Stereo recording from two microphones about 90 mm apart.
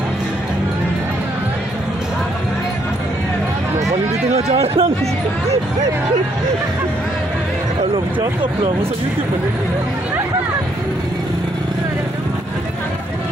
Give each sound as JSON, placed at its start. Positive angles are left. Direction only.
{"t": 4.6, "sound": "speech", "side_deg": -90}